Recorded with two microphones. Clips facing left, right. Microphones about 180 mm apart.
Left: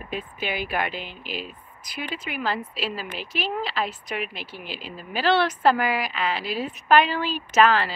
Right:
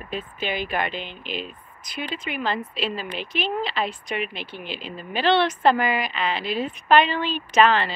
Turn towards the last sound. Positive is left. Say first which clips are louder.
# right 1 dB
turn(degrees=5)  # may be behind; listen again after turning